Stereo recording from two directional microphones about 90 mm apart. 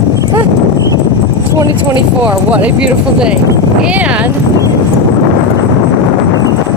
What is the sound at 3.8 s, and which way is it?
Speech, 15° right (ahead or behind).